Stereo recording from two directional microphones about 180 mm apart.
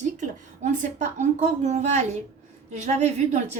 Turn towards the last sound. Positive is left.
turn(degrees=-40)  # may be behind; listen again after turning